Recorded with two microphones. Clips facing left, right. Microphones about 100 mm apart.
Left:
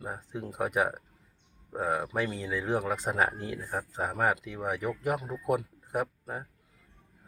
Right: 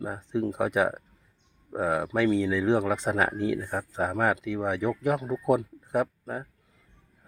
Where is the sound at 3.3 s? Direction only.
90° right.